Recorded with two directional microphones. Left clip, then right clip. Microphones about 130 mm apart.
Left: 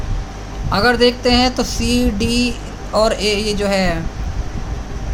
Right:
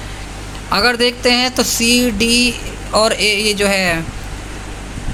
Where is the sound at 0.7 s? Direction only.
15° right (ahead or behind).